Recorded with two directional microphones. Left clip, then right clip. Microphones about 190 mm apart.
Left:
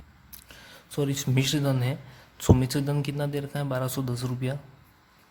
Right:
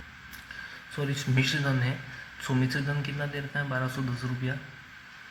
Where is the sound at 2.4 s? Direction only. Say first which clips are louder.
Left 5 dB; 75° left (ahead or behind).